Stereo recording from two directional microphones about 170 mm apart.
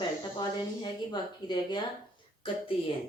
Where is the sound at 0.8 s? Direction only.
25° left (ahead or behind).